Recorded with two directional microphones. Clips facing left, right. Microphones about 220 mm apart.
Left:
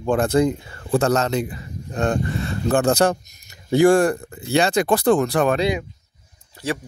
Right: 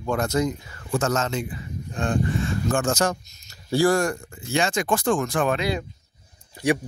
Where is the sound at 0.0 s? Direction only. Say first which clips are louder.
Left 6 dB; 30° left (ahead or behind).